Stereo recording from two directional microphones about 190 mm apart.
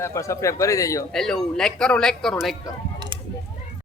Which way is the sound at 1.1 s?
Centre (ahead or behind).